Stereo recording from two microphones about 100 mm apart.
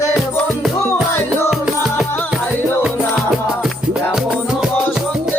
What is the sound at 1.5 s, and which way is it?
Music, 5° right (ahead or behind).